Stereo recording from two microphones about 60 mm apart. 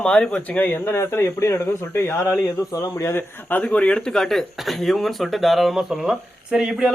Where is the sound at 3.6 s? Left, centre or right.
Left.